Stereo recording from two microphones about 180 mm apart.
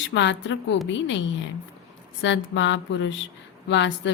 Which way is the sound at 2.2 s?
90° left.